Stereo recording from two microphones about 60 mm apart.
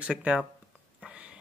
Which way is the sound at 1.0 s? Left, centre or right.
Centre.